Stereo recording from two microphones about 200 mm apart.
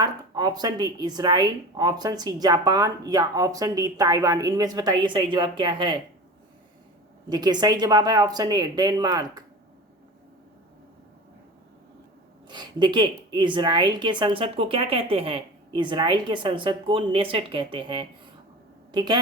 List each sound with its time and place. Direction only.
0.0 s speech: 20° right (ahead or behind)
7.3 s speech: 20° right (ahead or behind)
12.5 s a woman's voice: 20° right (ahead or behind)